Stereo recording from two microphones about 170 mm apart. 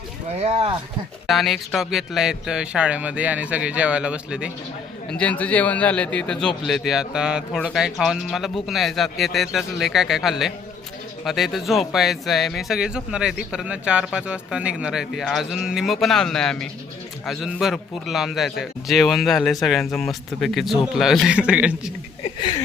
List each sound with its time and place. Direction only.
0.3 s speech: 40° right (ahead or behind)
1.3 s speech: centre (ahead or behind)
5.1 s speech: 10° left (ahead or behind)
22.2 s a sound: 25° left (ahead or behind)